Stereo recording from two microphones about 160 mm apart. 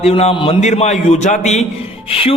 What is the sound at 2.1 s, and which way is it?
Speech, 35° left (ahead or behind).